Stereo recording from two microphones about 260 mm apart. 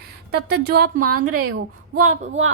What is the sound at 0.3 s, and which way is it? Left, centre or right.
Speech, right.